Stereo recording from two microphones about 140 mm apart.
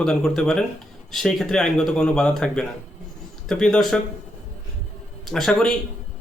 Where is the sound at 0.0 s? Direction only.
5° left (ahead or behind).